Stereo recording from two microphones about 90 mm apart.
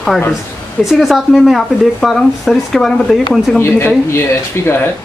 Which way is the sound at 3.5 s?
25° left (ahead or behind).